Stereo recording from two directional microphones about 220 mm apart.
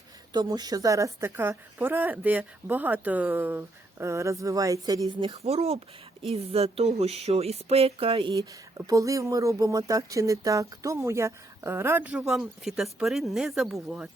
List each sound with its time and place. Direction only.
0.3 s a woman's voice: 20° right (ahead or behind); by 14.1 s centre (ahead or behind)